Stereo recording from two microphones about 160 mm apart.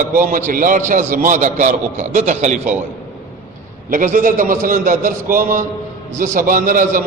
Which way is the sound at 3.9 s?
55° right (ahead or behind).